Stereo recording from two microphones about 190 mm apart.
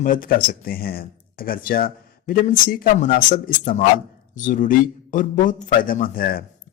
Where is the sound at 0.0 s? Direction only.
45° left (ahead or behind).